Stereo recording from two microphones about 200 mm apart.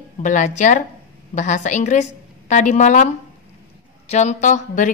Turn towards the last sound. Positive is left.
turn(degrees=40)  # may be behind; listen again after turning